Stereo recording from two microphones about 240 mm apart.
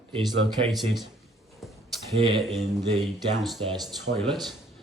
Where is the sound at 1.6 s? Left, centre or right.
Centre.